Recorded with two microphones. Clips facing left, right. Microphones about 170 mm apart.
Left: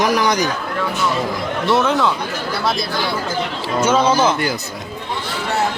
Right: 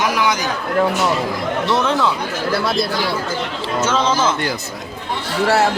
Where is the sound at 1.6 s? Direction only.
Centre (ahead or behind).